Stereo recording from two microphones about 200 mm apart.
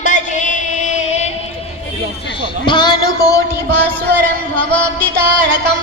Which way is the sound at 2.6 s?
25° left (ahead or behind).